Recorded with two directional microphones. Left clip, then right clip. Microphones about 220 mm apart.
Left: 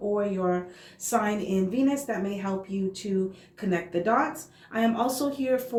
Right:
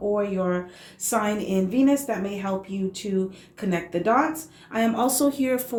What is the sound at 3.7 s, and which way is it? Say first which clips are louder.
A woman's voice: right 3 dB; 30° right (ahead or behind).